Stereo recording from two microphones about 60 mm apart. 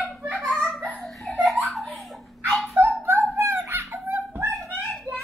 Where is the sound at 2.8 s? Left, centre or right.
Right.